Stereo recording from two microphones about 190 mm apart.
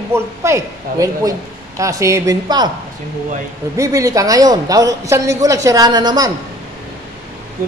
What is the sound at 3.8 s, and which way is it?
A woman's voice, 15° right (ahead or behind).